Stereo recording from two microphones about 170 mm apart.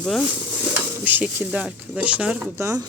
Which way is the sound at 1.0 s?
10° right (ahead or behind).